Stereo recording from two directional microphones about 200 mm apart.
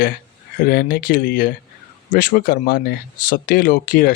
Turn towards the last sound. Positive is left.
turn(degrees=45)  # may be behind; listen again after turning